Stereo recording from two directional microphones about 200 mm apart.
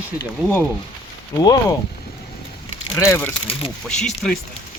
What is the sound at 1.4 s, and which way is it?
Speech, 20° left (ahead or behind).